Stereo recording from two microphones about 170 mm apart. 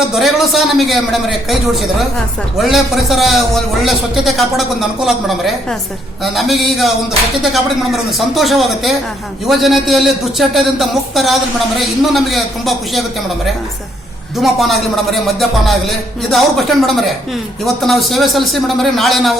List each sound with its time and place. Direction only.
0.1 s a man's voice: centre (ahead or behind)